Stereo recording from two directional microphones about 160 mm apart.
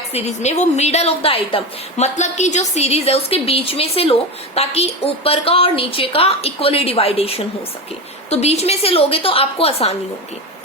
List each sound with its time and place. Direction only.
0.1 s a woman's voice: 45° left (ahead or behind)
2.1 s a woman's voice: 45° left (ahead or behind)